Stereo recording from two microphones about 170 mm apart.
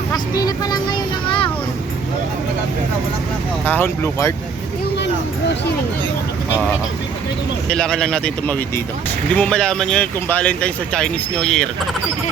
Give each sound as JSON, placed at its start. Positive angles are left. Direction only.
{"t": 0.1, "sound": "speech", "side_deg": 20}
{"t": 3.7, "sound": "speech", "side_deg": 10}
{"t": 7.7, "sound": "speech", "side_deg": 5}